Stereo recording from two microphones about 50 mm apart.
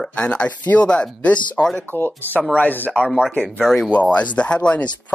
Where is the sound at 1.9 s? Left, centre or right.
Left.